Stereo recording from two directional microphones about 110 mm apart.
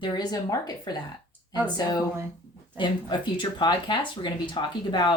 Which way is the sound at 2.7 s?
45° left (ahead or behind).